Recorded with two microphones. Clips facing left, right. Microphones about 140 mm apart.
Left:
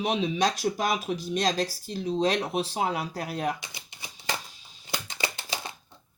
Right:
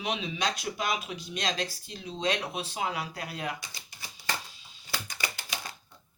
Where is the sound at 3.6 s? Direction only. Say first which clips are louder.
Left 2 dB; 20° left (ahead or behind).